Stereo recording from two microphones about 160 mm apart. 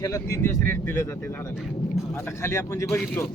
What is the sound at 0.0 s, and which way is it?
Speech, 20° left (ahead or behind).